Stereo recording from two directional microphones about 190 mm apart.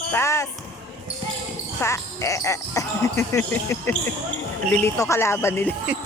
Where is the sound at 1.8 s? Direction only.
15° left (ahead or behind).